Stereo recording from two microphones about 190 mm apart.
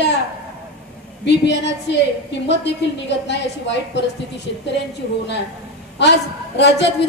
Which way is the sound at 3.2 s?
65° left (ahead or behind).